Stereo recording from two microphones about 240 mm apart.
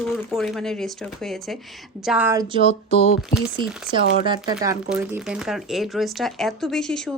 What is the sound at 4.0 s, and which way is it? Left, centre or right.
Speech, left.